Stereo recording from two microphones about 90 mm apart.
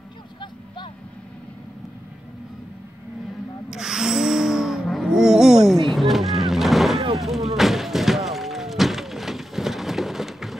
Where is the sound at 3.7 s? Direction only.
5° right (ahead or behind).